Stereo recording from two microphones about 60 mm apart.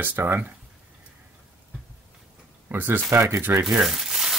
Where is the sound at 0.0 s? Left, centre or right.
Right.